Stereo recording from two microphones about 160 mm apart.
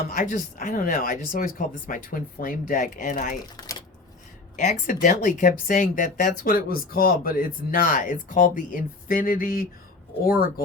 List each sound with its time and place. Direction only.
0.0 s speech: 55° left (ahead or behind)
3.6 s typewriter: 25° left (ahead or behind)
4.5 s speech: 55° left (ahead or behind)